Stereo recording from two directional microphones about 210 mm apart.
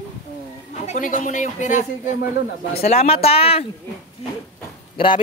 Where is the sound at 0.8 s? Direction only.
40° left (ahead or behind).